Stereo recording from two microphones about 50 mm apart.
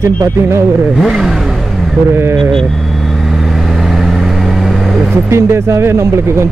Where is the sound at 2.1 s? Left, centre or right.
Right.